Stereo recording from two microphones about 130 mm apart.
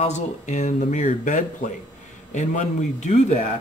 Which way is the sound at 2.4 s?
65° left (ahead or behind).